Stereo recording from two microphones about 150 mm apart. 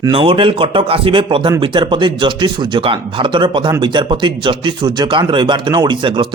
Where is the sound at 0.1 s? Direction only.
35° right (ahead or behind).